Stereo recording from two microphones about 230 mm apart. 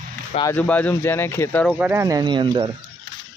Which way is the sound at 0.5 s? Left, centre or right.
Centre.